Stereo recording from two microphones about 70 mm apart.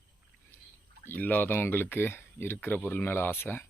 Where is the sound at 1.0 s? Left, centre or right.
Left.